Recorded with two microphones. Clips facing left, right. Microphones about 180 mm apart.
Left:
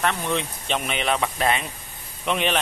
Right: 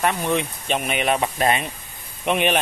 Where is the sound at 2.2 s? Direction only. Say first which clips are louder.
Right 3 dB; 15° right (ahead or behind).